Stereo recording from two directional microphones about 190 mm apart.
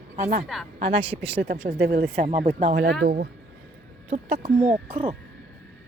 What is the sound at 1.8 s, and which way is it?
Speech, 55° right (ahead or behind).